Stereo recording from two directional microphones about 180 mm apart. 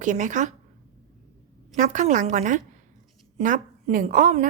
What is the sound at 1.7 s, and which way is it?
A woman's voice, 45° right (ahead or behind).